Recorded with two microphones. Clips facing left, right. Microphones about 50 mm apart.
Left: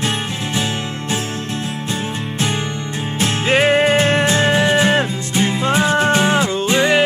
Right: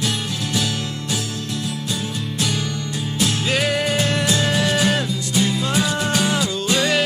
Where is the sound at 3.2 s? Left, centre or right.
Left.